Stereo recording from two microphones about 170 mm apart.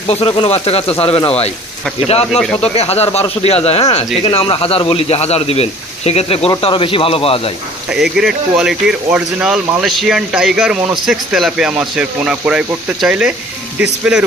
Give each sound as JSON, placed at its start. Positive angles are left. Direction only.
{"t": 0.1, "sound": "a man's voice", "side_deg": 35}
{"t": 7.9, "sound": "speech", "side_deg": -5}